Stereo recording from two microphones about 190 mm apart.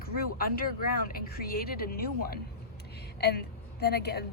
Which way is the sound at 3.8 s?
55° left (ahead or behind).